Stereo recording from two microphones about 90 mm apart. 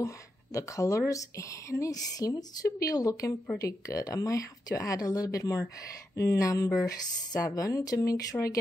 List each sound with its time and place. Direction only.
0.0 s a woman's voice: 35° left (ahead or behind)